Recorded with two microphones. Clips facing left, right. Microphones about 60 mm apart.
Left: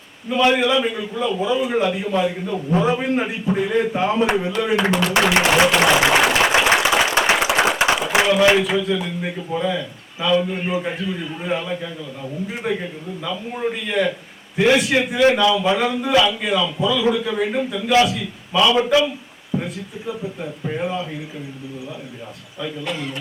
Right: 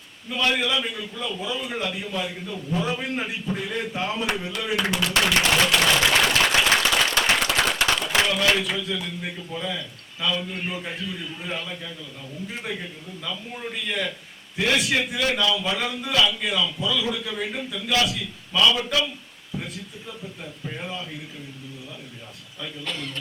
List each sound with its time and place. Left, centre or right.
0.3 s a man's voice: centre
2.6 s a man's voice: left
2.8 s a man's voice: centre
5.6 s applause: centre
8.1 s a man's voice: centre
22.6 s a man's voice: centre